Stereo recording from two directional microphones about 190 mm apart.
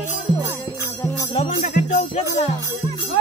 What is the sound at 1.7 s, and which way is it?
Speech, 45° left (ahead or behind).